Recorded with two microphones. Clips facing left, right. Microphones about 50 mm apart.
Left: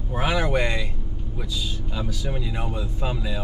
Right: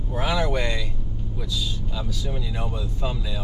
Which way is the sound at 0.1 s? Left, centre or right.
Left.